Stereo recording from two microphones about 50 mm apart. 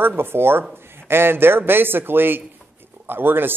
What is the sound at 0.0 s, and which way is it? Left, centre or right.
Speech, right.